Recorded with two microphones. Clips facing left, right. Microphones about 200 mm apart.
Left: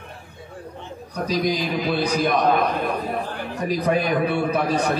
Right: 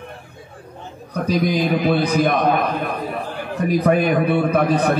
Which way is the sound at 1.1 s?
55° right (ahead or behind).